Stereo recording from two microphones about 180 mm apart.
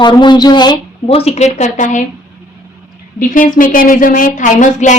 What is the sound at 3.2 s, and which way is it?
A woman's voice, 50° left (ahead or behind).